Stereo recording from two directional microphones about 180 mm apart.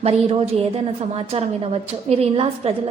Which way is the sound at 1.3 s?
35° right (ahead or behind).